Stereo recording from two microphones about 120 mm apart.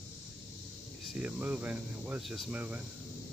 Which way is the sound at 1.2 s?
10° right (ahead or behind).